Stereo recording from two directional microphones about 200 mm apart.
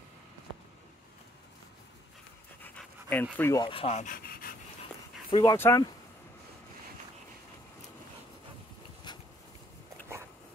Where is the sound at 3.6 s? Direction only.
30° left (ahead or behind); by 4.5 s 45° left (ahead or behind).